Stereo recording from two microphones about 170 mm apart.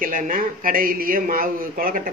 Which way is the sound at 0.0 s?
55° right (ahead or behind).